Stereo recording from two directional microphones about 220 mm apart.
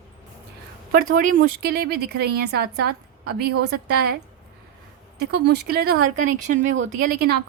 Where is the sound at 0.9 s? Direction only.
40° right (ahead or behind).